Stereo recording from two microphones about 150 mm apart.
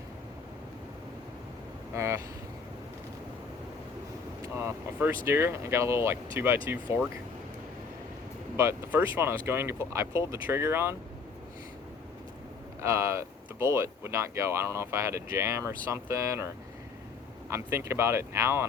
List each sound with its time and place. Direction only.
1.9 s speech: 20° right (ahead or behind)
4.4 s speech: 15° right (ahead or behind)
8.5 s speech: 15° right (ahead or behind)
12.8 s speech: 20° right (ahead or behind)
17.5 s speech: 15° right (ahead or behind)